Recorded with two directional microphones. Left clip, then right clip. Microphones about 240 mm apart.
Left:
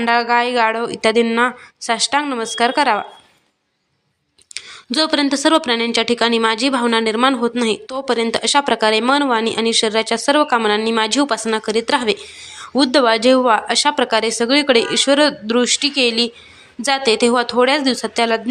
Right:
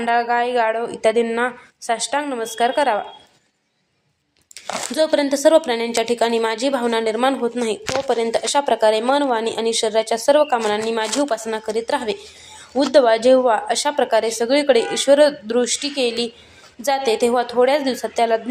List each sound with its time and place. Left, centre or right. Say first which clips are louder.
0.0 s speech: left 3 dB; left
4.5 s speech: left 1 dB; left